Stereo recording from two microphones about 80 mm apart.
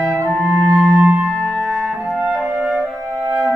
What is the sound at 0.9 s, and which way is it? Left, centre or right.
Music, centre.